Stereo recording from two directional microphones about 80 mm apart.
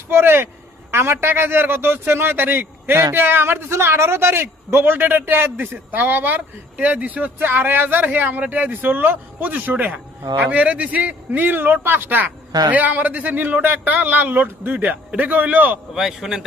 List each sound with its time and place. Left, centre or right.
0.1 s a man's voice: right
12.5 s a man's voice: right
12.7 s a man's voice: right
16.0 s a man's voice: centre